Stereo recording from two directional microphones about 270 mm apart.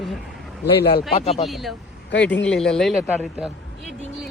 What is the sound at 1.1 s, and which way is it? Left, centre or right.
Speech, left.